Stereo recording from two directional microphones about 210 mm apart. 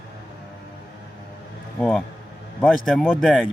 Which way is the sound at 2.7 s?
Centre (ahead or behind).